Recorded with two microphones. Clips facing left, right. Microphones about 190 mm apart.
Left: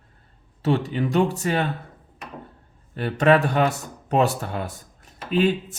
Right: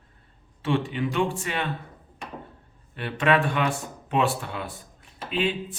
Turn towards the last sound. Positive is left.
turn(degrees=40)  # may be behind; listen again after turning